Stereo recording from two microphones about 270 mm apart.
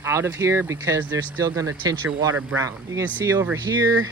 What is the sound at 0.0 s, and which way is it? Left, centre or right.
Speech, centre.